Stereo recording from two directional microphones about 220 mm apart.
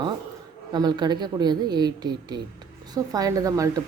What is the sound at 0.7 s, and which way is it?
A woman's voice, 20° right (ahead or behind).